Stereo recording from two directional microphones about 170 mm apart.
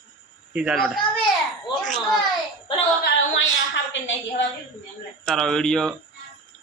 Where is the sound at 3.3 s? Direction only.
90° left.